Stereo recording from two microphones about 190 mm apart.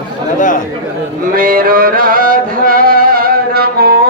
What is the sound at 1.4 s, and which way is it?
Music, 50° right (ahead or behind).